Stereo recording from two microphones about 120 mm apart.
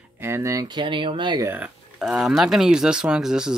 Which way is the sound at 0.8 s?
45° right (ahead or behind).